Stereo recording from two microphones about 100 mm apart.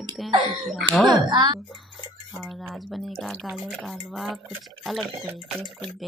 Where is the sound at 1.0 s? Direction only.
45° right (ahead or behind).